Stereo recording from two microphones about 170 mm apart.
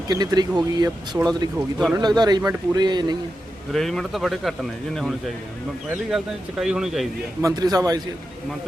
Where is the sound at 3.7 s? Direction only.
Centre (ahead or behind).